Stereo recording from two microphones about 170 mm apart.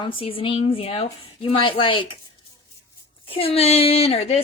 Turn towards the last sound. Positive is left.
turn(degrees=40)  # may be behind; listen again after turning